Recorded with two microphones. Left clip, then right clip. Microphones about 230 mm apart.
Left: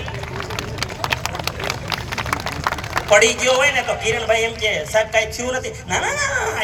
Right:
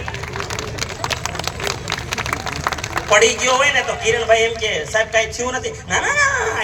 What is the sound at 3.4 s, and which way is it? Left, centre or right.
A man's voice, centre.